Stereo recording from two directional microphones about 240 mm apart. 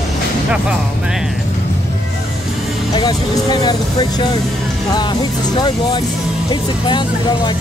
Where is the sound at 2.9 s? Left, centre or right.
Centre.